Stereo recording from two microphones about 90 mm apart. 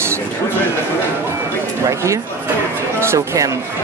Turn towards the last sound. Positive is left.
turn(degrees=-35)  # may be behind; listen again after turning